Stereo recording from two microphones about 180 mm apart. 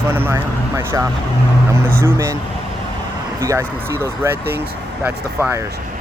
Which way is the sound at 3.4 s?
15° right (ahead or behind).